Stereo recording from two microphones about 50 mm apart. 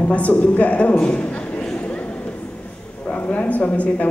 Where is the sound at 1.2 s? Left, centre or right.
Left.